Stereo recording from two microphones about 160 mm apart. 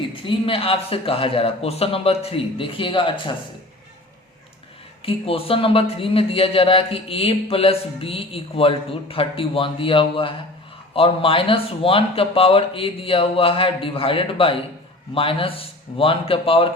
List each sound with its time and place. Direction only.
0.1 s speech: 35° left (ahead or behind)
5.0 s speech: 35° left (ahead or behind)